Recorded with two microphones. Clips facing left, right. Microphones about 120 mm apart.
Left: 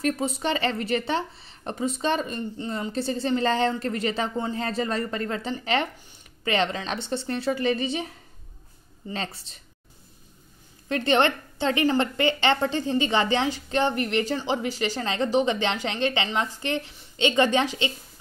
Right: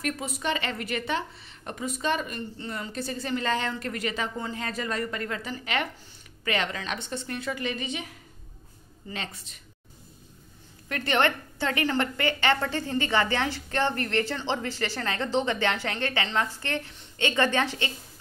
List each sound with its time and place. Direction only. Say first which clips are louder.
0.0 s a woman's voice: left 5 dB; 30° left (ahead or behind)
10.9 s a woman's voice: left 4 dB; 25° left (ahead or behind)